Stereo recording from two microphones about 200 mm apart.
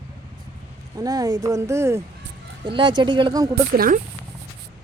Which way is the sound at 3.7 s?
45° right (ahead or behind).